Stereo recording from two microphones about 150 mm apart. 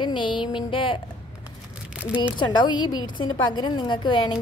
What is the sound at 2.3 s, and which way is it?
A woman's voice, 30° left (ahead or behind).